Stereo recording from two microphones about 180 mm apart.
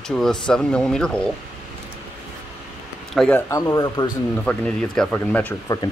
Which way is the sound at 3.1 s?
5° left (ahead or behind).